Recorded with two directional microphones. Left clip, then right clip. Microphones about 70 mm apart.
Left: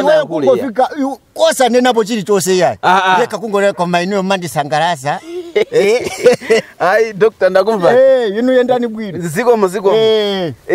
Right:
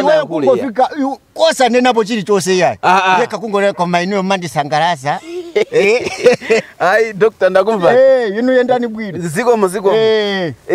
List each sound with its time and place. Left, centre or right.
0.4 s a man's voice: centre
0.7 s speech: left
2.8 s speech: centre
3.2 s speech: left
6.8 s a man's voice: centre
7.9 s speech: left
9.4 s speech: centre
9.8 s speech: left